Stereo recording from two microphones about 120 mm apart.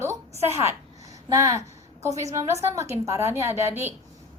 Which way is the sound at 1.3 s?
25° right (ahead or behind).